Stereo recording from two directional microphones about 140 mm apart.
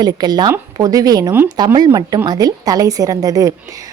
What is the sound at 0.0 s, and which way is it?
A woman's voice, 30° right (ahead or behind).